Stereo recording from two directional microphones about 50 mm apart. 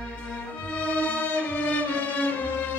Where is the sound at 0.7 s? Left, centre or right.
Left.